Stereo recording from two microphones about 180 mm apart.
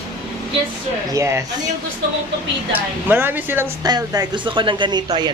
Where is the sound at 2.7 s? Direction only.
10° right (ahead or behind).